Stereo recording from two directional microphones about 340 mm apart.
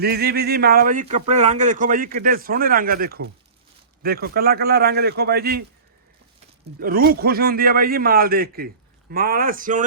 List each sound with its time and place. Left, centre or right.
0.0 s speech: right
6.7 s speech: right